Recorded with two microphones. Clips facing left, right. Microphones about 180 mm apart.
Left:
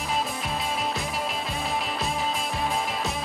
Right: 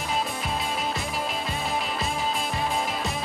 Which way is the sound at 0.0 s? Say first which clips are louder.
Even; centre (ahead or behind).